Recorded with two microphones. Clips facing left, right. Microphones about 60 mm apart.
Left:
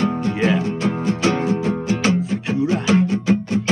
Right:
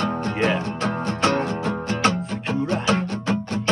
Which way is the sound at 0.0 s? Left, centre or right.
Right.